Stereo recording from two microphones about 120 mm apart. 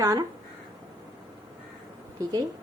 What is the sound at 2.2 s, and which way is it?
Speech, 30° right (ahead or behind).